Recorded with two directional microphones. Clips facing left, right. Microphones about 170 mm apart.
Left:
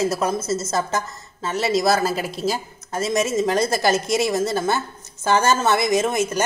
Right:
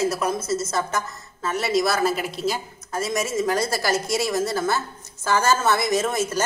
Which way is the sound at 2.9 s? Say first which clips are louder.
Left 3 dB; 20° left (ahead or behind).